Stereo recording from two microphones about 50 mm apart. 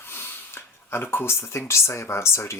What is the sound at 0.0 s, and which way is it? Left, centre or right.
Speech, left.